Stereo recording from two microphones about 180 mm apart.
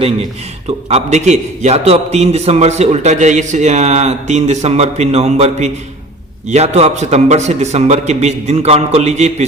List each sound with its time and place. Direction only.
0.9 s a man's voice: 40° right (ahead or behind)